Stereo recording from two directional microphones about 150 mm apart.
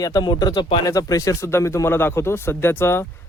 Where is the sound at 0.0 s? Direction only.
25° left (ahead or behind).